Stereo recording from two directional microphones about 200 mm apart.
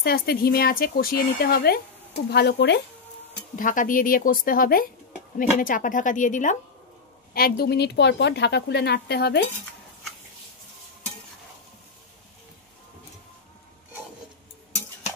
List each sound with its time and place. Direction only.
0.0 s speech: 50° left (ahead or behind)
3.5 s a woman's voice: 40° left (ahead or behind)
7.3 s speech: 50° left (ahead or behind)